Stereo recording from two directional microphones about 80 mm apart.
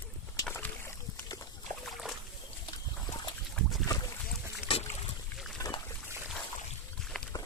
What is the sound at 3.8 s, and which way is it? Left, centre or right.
Boat, left.